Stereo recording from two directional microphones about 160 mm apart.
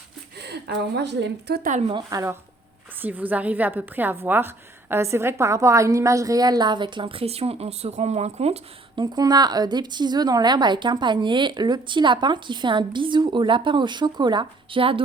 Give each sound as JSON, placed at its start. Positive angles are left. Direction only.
{"t": 0.3, "sound": "a woman's voice", "side_deg": -90}
{"t": 1.9, "sound": "a woman's voice", "side_deg": -25}
{"t": 9.1, "sound": "a woman's voice", "side_deg": -25}